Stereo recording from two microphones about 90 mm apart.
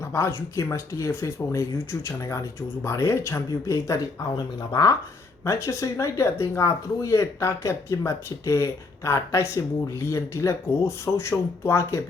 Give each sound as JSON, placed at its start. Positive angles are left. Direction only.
{"t": 0.1, "sound": "speech", "side_deg": 30}
{"t": 4.7, "sound": "speech", "side_deg": 50}
{"t": 5.5, "sound": "speech", "side_deg": 35}